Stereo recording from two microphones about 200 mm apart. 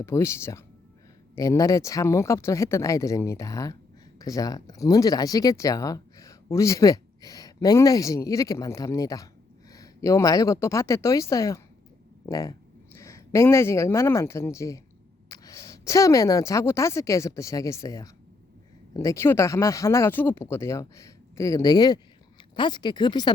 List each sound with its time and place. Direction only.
0.0 s a woman's voice: 15° left (ahead or behind)